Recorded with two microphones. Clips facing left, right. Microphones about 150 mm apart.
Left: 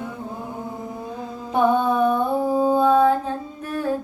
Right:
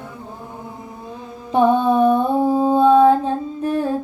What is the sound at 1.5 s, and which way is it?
Mantra, 30° right (ahead or behind).